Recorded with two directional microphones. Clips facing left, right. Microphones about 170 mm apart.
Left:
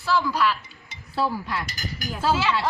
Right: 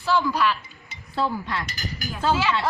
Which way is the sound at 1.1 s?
5° left (ahead or behind).